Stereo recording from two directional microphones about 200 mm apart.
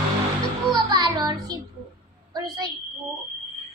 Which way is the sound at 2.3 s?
20° right (ahead or behind).